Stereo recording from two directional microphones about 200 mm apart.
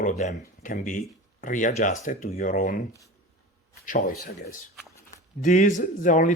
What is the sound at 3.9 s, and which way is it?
Speech, 40° left (ahead or behind).